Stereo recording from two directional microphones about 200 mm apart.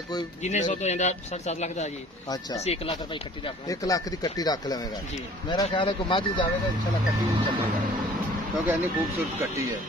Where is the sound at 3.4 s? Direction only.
15° left (ahead or behind).